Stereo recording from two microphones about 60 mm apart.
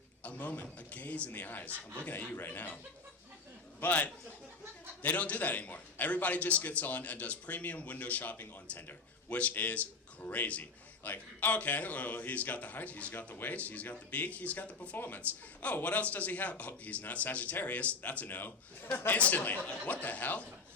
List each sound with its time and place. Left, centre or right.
0.2 s a man's voice: left
3.8 s a man's voice: left